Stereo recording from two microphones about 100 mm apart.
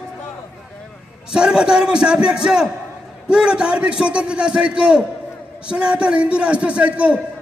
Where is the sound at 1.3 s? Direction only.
5° right (ahead or behind).